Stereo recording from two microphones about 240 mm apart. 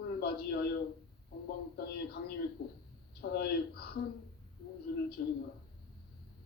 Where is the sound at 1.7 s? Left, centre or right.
Left.